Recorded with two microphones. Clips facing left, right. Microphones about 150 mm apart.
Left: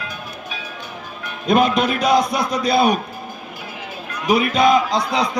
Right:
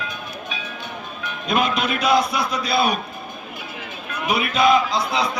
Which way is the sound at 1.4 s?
45° left (ahead or behind).